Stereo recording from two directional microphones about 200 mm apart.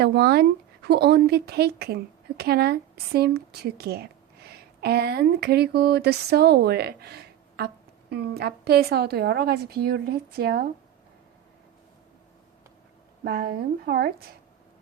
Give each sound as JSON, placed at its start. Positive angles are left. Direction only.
{"t": 0.0, "sound": "a woman's voice", "side_deg": -55}
{"t": 13.2, "sound": "a woman's voice", "side_deg": -50}